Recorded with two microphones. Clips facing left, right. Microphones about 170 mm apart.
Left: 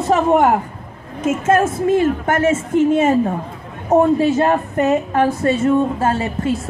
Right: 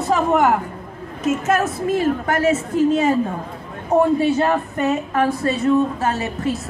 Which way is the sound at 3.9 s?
45° left (ahead or behind).